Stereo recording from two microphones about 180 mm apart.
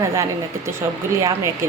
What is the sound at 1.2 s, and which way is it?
Speech, 15° right (ahead or behind).